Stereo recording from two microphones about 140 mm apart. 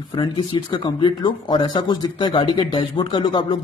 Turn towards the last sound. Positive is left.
turn(degrees=35)  # may be behind; listen again after turning